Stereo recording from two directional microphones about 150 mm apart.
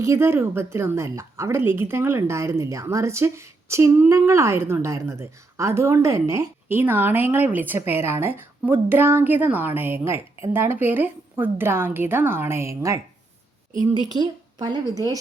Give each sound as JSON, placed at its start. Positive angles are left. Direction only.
{"t": 0.0, "sound": "a woman's voice", "side_deg": -20}